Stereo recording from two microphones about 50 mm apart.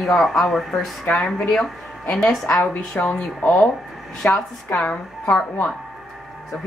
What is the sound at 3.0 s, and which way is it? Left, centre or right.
Speech, left.